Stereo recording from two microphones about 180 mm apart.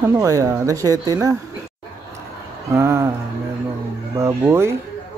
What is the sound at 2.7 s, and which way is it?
Speech, 15° right (ahead or behind).